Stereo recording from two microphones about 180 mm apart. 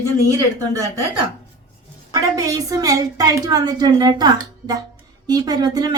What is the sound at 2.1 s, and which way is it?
A woman's voice, 20° right (ahead or behind).